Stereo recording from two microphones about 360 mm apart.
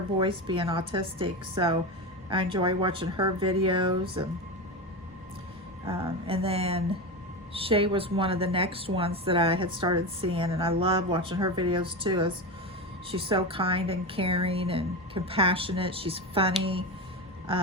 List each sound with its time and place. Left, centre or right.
0.2 s a woman's voice: centre
5.8 s a woman's voice: centre